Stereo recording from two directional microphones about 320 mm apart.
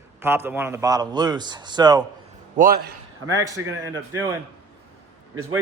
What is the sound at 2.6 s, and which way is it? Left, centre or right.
Speech, right.